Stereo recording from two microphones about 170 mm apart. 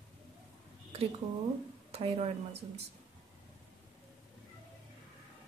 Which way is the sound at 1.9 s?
35° right (ahead or behind).